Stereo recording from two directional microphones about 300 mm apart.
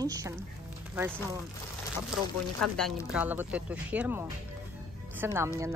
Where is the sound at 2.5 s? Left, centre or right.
Centre.